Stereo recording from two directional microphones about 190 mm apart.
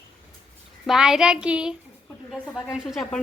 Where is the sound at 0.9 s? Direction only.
5° right (ahead or behind).